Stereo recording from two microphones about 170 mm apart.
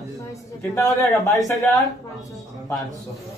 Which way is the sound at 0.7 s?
20° left (ahead or behind).